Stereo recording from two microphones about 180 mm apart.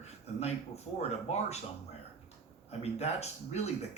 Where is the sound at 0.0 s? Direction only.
35° left (ahead or behind).